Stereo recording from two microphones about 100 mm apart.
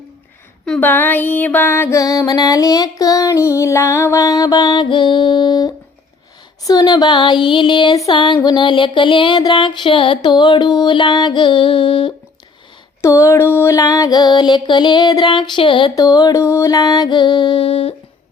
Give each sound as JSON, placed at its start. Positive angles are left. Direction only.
{"t": 0.8, "sound": "a sound", "side_deg": 20}
{"t": 2.0, "sound": "female singing", "side_deg": 35}
{"t": 6.7, "sound": "music", "side_deg": 40}
{"t": 8.1, "sound": "a sound", "side_deg": 55}
{"t": 9.5, "sound": "music", "side_deg": 55}
{"t": 13.0, "sound": "music", "side_deg": 30}
{"t": 16.0, "sound": "female singing", "side_deg": 40}
{"t": 16.4, "sound": "music", "side_deg": 30}